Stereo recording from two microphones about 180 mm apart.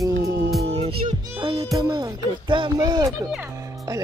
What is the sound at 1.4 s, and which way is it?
Speech, 30° right (ahead or behind).